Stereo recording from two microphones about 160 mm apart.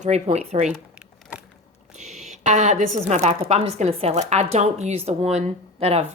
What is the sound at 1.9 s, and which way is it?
A woman's voice, 45° right (ahead or behind).